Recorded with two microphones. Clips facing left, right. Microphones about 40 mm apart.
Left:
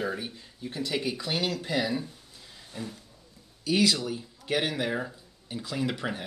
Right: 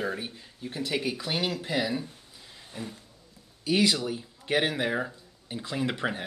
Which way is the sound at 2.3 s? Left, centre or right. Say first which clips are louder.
Even; centre.